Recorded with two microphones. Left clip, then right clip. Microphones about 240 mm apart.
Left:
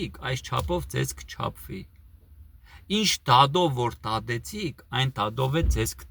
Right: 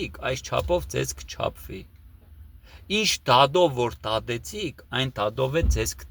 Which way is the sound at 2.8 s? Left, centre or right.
Centre.